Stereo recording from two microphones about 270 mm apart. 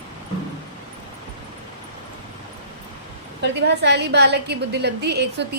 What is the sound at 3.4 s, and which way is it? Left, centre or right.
A woman's voice, right.